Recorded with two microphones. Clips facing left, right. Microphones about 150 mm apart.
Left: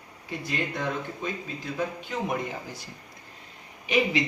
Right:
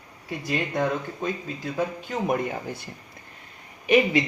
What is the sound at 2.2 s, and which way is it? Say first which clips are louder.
Speech: right 7 dB; 55° right (ahead or behind).